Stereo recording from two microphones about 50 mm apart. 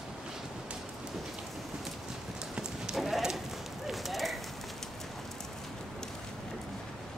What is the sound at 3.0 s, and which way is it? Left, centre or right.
Clip-clop, centre.